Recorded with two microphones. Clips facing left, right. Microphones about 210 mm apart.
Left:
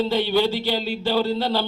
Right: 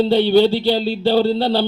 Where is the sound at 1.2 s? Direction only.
35° right (ahead or behind).